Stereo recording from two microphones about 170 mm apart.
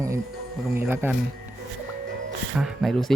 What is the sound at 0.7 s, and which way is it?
Speech, 15° right (ahead or behind).